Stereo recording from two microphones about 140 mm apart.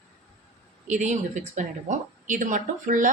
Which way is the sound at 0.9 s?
60° right (ahead or behind).